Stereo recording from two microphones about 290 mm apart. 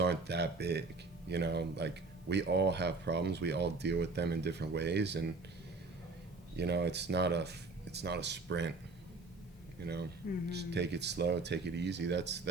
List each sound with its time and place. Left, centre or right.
0.0 s speech: right
6.6 s speech: right
9.8 s speech: right